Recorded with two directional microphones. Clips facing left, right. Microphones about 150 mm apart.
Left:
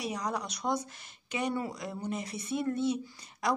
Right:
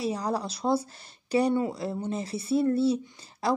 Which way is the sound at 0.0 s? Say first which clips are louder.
Right 5 dB; 30° right (ahead or behind).